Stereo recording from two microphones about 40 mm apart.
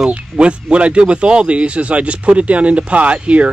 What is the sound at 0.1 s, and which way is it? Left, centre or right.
Speech, right.